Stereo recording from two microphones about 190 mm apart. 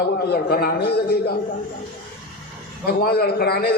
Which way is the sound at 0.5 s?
55° left (ahead or behind).